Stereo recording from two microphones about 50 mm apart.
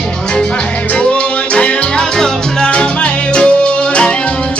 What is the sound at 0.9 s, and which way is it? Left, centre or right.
Music, left.